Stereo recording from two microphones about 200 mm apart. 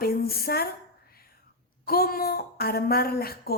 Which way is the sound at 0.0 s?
50° left (ahead or behind).